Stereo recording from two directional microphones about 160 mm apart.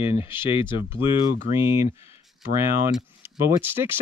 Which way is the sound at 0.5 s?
35° left (ahead or behind).